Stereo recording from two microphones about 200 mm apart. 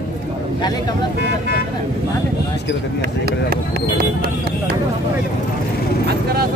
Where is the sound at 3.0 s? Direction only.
50° right (ahead or behind).